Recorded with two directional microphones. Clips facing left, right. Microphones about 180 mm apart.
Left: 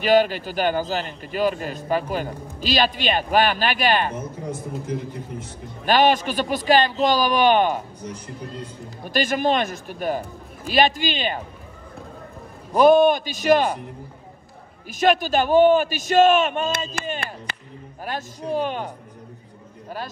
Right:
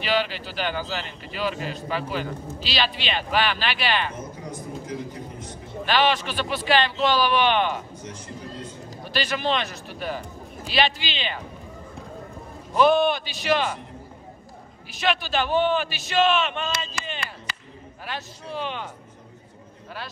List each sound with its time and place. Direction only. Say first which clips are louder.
0.0 s a man's voice: left 8 dB; 45° left (ahead or behind)
5.9 s a man's voice: left 4 dB; 45° left (ahead or behind)
12.7 s a man's voice: left 5 dB; 45° left (ahead or behind)
14.9 s a man's voice: left 7 dB; 45° left (ahead or behind)